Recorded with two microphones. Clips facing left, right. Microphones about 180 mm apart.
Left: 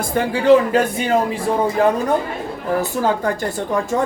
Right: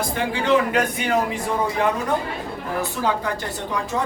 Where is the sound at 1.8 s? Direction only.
35° left (ahead or behind).